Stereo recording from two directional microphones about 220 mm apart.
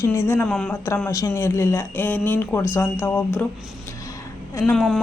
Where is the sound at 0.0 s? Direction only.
10° left (ahead or behind).